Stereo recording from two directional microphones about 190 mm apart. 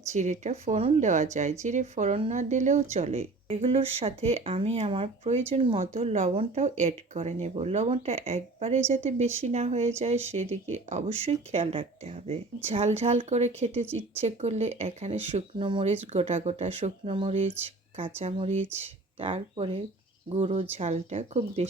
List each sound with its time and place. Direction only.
0.1 s speech: 40° right (ahead or behind)